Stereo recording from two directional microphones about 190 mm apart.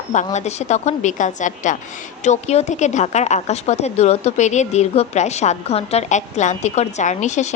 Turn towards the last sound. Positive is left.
turn(degrees=40)  # may be behind; listen again after turning